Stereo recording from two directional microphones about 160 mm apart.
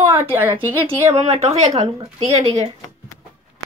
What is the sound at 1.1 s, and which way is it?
Speech, 40° right (ahead or behind).